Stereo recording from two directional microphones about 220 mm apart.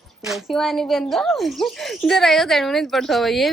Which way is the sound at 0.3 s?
Centre (ahead or behind).